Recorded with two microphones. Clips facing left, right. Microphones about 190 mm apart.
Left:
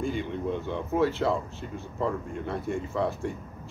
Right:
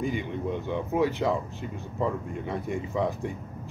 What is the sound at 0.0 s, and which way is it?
Speech, 15° right (ahead or behind).